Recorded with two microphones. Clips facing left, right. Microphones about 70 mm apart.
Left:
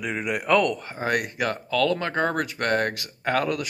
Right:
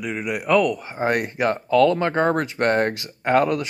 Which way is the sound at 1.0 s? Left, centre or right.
Right.